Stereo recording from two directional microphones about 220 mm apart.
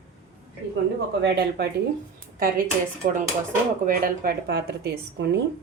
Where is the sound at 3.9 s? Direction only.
40° right (ahead or behind).